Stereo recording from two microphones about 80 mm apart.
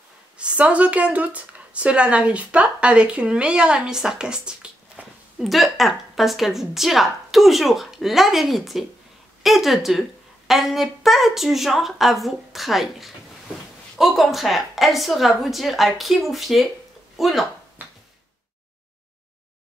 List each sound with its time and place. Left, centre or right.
0.4 s speech: centre
5.4 s a woman's voice: centre
17.8 s a sound: right